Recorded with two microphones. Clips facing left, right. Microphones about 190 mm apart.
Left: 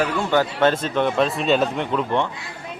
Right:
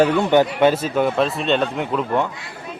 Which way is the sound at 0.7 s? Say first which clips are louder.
Right 2 dB; 5° right (ahead or behind).